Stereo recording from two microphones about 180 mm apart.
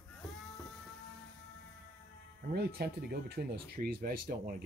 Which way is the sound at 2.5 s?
65° right (ahead or behind).